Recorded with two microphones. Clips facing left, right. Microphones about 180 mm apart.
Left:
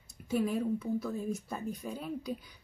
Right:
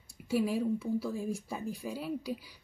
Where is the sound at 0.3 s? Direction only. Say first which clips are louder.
Right 1 dB; 5° right (ahead or behind).